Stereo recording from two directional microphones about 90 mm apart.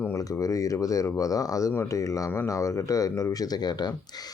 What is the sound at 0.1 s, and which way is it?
Speech, 35° left (ahead or behind).